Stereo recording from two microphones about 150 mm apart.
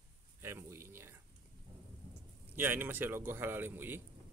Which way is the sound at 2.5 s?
15° right (ahead or behind).